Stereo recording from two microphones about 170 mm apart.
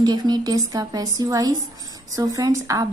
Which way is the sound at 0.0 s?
25° right (ahead or behind).